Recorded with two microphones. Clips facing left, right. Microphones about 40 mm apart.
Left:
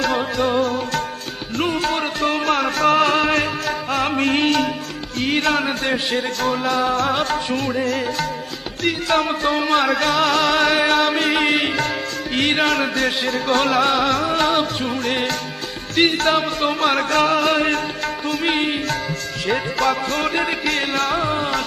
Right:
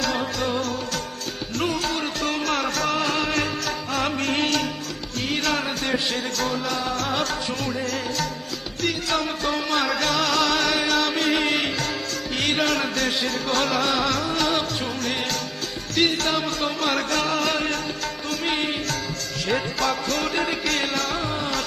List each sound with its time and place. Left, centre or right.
0.3 s music: left
2.8 s music: left
18.5 s music: left
19.8 s music: left